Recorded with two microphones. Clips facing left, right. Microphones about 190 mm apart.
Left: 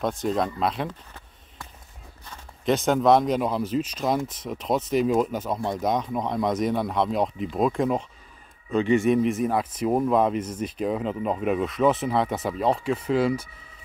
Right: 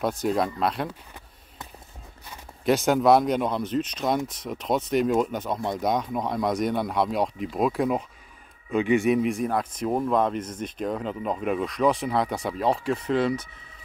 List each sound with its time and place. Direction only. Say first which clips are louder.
0.0 s speech: even; 5° right (ahead or behind)
2.2 s speech: right 1 dB; 10° right (ahead or behind)